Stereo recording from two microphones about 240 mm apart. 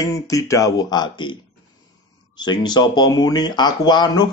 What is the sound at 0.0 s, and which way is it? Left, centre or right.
Speech, centre.